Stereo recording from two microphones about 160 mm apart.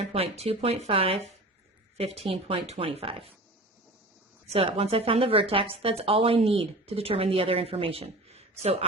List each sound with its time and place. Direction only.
0.1 s speech: 40° right (ahead or behind)
4.4 s speech: 40° right (ahead or behind)